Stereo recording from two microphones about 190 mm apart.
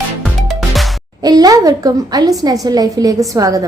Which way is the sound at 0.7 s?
Centre (ahead or behind).